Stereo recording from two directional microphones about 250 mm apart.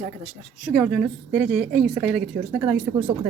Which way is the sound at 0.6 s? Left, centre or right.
Centre.